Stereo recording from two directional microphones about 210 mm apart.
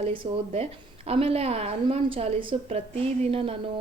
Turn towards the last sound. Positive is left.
turn(degrees=-25)  # may be behind; listen again after turning